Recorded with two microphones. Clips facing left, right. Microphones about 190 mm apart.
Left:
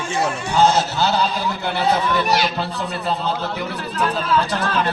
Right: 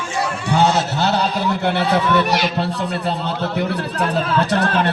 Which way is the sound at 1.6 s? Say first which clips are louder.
Even; 70° right (ahead or behind).